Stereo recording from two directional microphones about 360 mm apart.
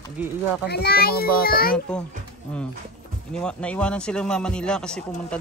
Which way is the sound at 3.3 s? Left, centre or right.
Centre.